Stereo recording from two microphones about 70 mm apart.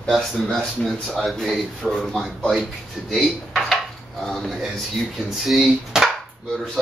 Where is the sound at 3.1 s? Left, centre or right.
Centre.